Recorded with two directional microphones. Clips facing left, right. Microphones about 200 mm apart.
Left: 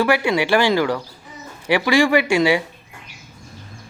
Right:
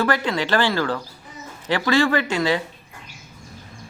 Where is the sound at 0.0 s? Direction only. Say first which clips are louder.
Left 4 dB; 10° left (ahead or behind).